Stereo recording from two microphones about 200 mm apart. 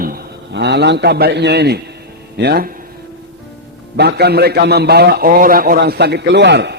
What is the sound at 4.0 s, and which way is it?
A man's voice, 55° right (ahead or behind).